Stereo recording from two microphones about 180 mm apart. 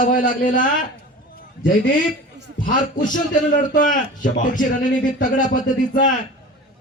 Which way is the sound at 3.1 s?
50° left (ahead or behind).